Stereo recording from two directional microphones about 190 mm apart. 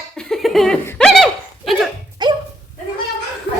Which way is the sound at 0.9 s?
5° left (ahead or behind).